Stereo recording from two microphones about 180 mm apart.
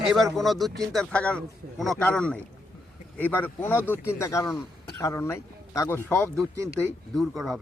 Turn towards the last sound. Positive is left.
turn(degrees=0)  # may be behind; listen again after turning